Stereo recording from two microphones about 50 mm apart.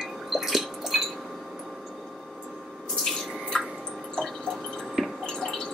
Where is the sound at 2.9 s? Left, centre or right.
Centre.